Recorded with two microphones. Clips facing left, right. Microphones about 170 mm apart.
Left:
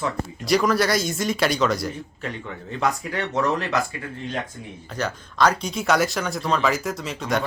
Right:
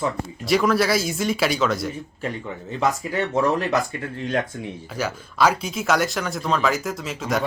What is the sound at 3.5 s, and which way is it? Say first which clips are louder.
Speech: right 2 dB; 40° right (ahead or behind).